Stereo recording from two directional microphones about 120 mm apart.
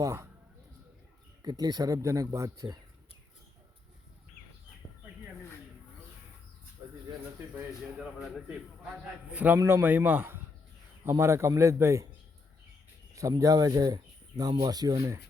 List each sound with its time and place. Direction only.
0.0 s a man's voice: 25° right (ahead or behind)
1.4 s speech: 35° right (ahead or behind)
7.5 s a man's voice: 5° right (ahead or behind); by 12.0 s 25° right (ahead or behind)
13.3 s speech: 30° right (ahead or behind)